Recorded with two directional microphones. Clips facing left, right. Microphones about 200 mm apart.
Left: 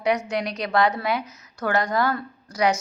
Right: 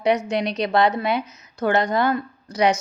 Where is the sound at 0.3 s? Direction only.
25° right (ahead or behind).